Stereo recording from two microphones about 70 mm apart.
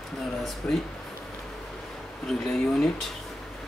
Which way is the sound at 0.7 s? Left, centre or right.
Centre.